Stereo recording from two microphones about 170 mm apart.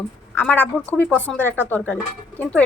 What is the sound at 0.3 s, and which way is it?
Speech, 10° left (ahead or behind).